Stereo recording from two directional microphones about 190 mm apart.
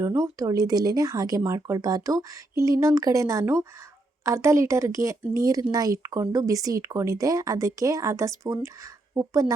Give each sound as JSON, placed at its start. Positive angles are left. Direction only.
{"t": 0.0, "sound": "speech", "side_deg": -15}